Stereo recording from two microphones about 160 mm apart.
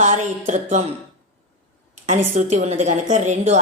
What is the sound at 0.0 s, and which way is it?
Speech, 45° right (ahead or behind).